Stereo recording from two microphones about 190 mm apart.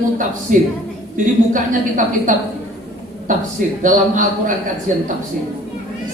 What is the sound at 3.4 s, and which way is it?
A woman's voice, 45° right (ahead or behind).